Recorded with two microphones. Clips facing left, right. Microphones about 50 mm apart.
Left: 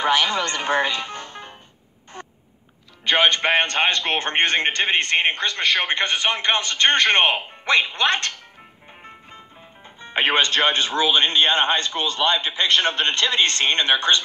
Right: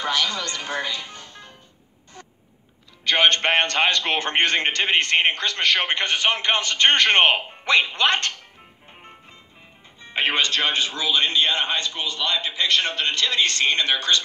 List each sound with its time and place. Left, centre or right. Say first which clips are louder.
0.0 s speech: left 5 dB; left
2.1 s a sound: left 6 dB; left
3.6 s a man's voice: even; left
10.0 s a man's voice: left 3 dB; left